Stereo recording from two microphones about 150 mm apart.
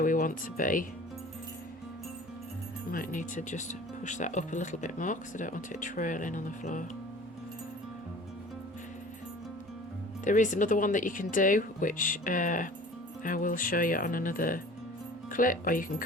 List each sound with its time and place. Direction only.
0.0 s speech: 65° left (ahead or behind)
2.9 s speech: 65° left (ahead or behind)
10.2 s speech: 55° left (ahead or behind)